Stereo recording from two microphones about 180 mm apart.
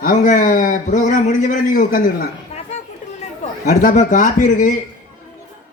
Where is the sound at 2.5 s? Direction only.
35° left (ahead or behind).